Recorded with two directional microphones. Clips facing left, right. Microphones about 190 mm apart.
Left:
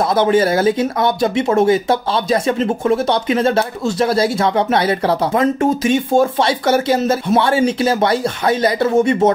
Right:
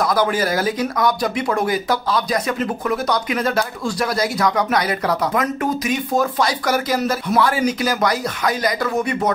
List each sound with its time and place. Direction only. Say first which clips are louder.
0.1 s speech: left 5 dB; 25° left (ahead or behind)